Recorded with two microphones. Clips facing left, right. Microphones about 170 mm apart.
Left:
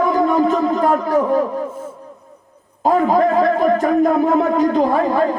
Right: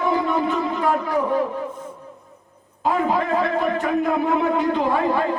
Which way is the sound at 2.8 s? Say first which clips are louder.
Left 7 dB; 40° left (ahead or behind).